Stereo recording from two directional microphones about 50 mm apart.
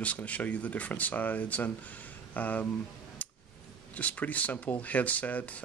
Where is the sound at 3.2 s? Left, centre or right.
Left.